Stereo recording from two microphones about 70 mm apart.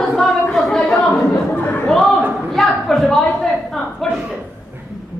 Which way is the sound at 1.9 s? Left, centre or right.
Centre.